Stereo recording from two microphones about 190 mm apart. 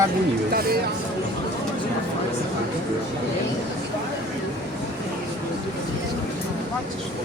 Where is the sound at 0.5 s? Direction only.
55° right (ahead or behind).